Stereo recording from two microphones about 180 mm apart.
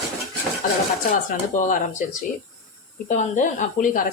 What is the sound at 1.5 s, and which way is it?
Speech, 45° left (ahead or behind).